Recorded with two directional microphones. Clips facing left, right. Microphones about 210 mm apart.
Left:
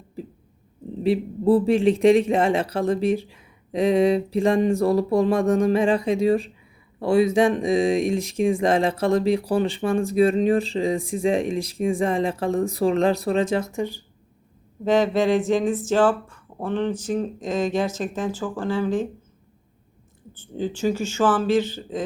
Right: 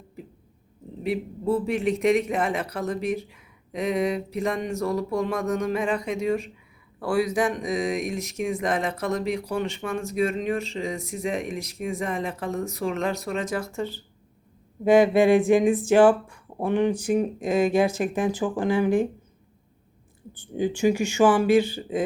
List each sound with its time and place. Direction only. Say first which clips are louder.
1.0 s speech: left 6 dB; 30° left (ahead or behind); by 14.0 s 15° left (ahead or behind)
14.8 s speech: right 2 dB; 10° right (ahead or behind)
20.3 s speech: right 2 dB; 15° right (ahead or behind)